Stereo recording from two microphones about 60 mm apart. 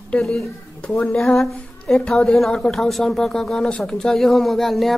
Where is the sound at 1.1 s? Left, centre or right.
Centre.